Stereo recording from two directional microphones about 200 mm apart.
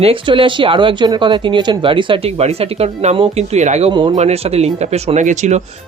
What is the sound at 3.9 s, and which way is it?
Speech, 25° right (ahead or behind).